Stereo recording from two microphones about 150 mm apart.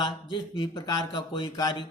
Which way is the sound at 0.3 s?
30° left (ahead or behind).